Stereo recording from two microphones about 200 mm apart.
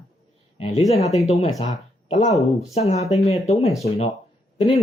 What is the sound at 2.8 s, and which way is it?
Speech, 30° left (ahead or behind).